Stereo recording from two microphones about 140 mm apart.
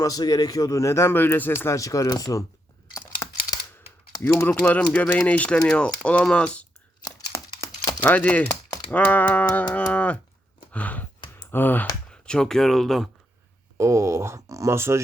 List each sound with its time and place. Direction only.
0.0 s speech: 25° left (ahead or behind)
3.2 s a sound: 20° left (ahead or behind)
4.4 s speech: 15° left (ahead or behind)
7.0 s crumpling: 25° left (ahead or behind)
8.0 s speech: 10° left (ahead or behind)
10.7 s a sound: 10° left (ahead or behind)
11.5 s speech: 15° left (ahead or behind)
13.7 s speech: 20° right (ahead or behind)